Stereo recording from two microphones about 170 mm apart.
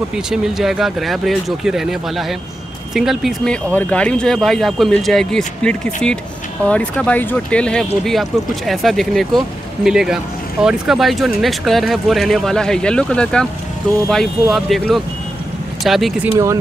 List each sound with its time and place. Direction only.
0.3 s speech: centre (ahead or behind)
16.3 s speech: 15° right (ahead or behind)